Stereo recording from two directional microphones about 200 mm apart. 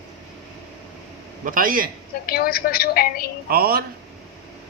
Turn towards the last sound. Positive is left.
turn(degrees=-50)  # may be behind; listen again after turning